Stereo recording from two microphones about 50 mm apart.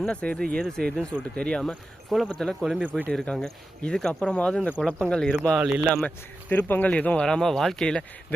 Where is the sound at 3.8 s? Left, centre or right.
Centre.